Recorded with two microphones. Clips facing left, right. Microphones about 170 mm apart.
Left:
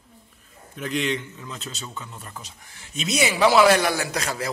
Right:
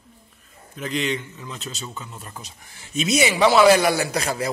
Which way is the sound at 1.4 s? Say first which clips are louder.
Right 2 dB; 15° right (ahead or behind).